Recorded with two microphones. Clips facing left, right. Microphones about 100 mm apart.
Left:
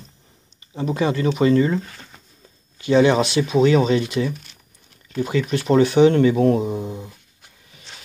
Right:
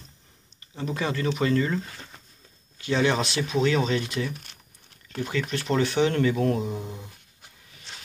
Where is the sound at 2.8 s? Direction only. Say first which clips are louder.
Left 8 dB; 10° left (ahead or behind).